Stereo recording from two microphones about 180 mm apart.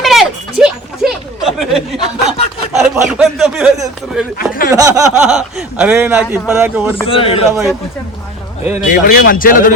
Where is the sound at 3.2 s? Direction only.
5° right (ahead or behind).